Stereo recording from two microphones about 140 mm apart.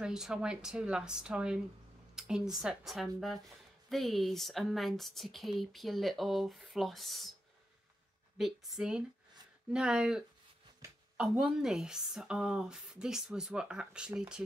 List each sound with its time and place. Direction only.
0.0 s speech: 5° right (ahead or behind)
8.4 s speech: centre (ahead or behind)
10.8 s a sound: 20° right (ahead or behind)
11.1 s speech: 5° right (ahead or behind)